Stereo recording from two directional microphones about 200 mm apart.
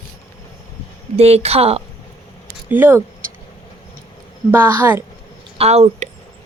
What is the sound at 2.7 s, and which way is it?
Speech, 10° right (ahead or behind).